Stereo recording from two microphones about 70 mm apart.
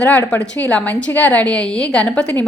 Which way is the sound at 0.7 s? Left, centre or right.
Left.